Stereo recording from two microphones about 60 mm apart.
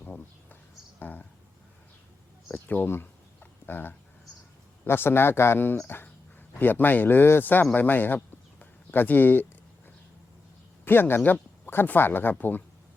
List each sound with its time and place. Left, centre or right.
0.9 s speech: left
2.5 s speech: left
2.9 s a sound: left
4.9 s a man's voice: left
10.8 s speech: left